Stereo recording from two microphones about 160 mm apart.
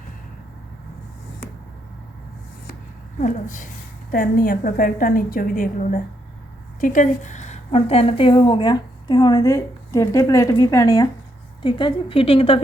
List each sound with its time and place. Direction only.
3.2 s a woman's voice: 55° left (ahead or behind); by 12.5 s 35° left (ahead or behind)